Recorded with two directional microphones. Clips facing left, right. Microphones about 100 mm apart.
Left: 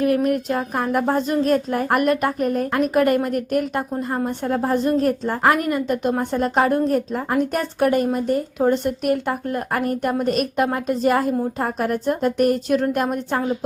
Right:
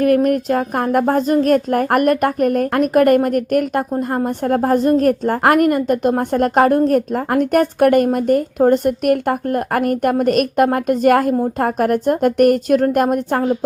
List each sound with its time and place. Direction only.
0.0 s a woman's voice: 50° right (ahead or behind)